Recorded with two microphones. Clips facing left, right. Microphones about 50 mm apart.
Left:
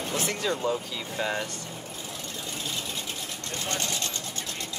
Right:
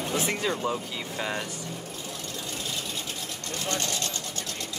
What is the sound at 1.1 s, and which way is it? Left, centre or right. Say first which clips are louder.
Speech: left 2 dB; centre.